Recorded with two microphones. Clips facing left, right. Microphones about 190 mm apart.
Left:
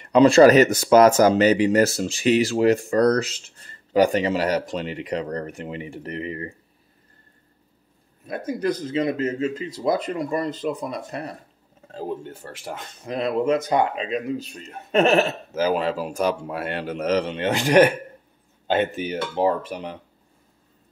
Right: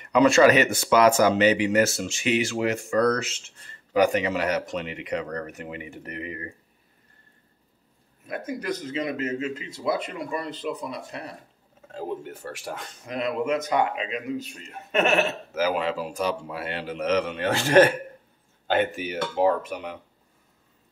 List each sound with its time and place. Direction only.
0.0 s speech: 30° left (ahead or behind)
8.3 s speech: 35° left (ahead or behind)
11.9 s speech: 30° left (ahead or behind)
18.8 s speech: 25° left (ahead or behind)